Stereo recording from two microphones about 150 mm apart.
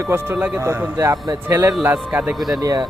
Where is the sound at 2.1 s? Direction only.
5° right (ahead or behind).